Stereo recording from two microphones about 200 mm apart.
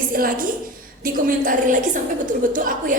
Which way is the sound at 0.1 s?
45° right (ahead or behind).